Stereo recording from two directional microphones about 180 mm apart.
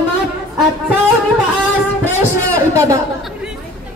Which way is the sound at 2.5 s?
15° right (ahead or behind).